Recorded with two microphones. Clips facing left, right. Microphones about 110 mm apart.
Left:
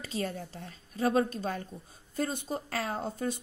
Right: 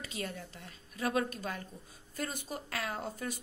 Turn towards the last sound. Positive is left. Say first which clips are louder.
# left 5 dB
turn(degrees=30)  # may be behind; listen again after turning